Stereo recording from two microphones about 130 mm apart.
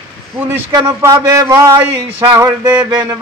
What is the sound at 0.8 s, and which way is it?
Speech, 20° right (ahead or behind).